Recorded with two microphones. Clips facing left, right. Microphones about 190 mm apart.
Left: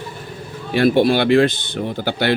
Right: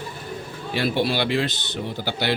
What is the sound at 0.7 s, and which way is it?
Speech, 50° left (ahead or behind).